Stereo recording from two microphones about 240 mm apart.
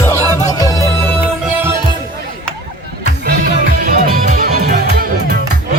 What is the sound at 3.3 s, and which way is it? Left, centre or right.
Music, right.